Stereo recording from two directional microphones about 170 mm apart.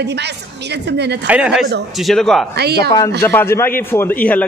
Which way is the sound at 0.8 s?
80° right.